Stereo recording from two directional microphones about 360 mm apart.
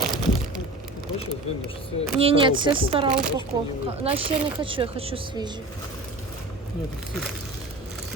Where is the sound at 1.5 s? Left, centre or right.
Centre.